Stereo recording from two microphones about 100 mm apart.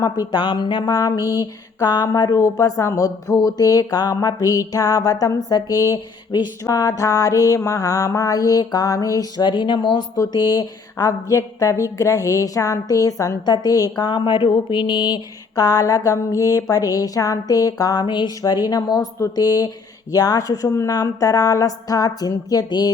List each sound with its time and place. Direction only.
0.3 s speech: 50° left (ahead or behind)
0.9 s speech: 35° left (ahead or behind)
2.2 s speech: 35° left (ahead or behind)
9.5 s speech: 50° left (ahead or behind)